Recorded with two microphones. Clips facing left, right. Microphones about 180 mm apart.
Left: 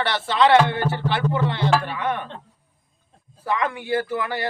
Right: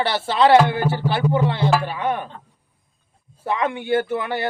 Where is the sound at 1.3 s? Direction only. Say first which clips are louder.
Right 2 dB; 25° right (ahead or behind).